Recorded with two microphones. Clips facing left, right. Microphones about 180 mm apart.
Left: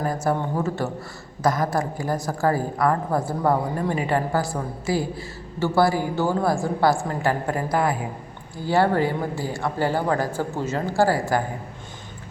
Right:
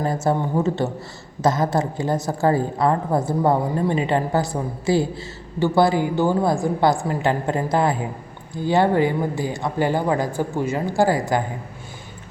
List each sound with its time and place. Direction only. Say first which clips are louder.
0.0 s a woman's voice: right 2 dB; 25° right (ahead or behind)